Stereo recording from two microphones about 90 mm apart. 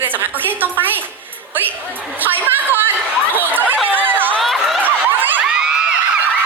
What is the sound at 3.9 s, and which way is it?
Chatter, 20° right (ahead or behind).